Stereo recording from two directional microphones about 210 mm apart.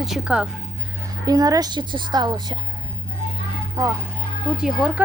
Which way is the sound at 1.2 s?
20° right (ahead or behind).